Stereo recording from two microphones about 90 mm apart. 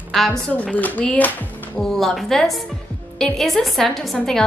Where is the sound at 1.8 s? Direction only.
5° left (ahead or behind).